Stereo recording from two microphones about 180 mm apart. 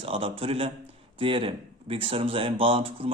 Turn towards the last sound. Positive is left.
turn(degrees=-30)  # may be behind; listen again after turning